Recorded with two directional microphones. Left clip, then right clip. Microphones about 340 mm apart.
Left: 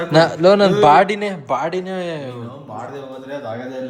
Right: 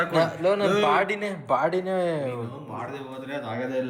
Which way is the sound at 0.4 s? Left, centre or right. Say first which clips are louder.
Left 12 dB; left.